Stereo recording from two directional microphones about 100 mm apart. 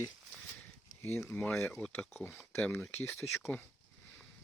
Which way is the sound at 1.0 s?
25° left (ahead or behind).